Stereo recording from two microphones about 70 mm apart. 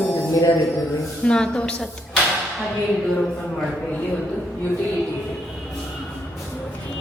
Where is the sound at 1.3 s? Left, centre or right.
Centre.